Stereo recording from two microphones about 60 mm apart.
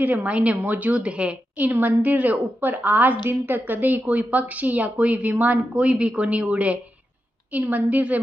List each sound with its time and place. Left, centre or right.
0.0 s a woman's voice: right